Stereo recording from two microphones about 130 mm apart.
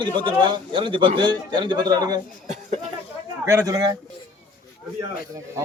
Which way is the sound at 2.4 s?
60° right (ahead or behind).